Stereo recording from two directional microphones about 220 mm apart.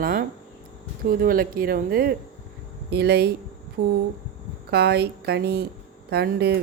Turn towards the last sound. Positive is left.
turn(degrees=-45)  # may be behind; listen again after turning